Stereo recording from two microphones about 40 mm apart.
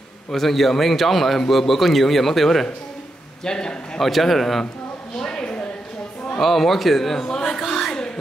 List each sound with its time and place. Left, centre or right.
0.3 s a man's voice: centre
3.4 s speech: centre
4.0 s a man's voice: centre
5.2 s a sound: centre
6.4 s a man's voice: centre
7.2 s a sound: centre